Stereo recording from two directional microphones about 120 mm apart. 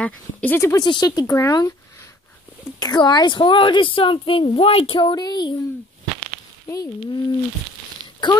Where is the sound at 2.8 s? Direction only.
35° left (ahead or behind).